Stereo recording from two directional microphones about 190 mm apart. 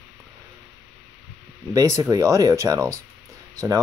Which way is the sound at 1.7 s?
15° right (ahead or behind).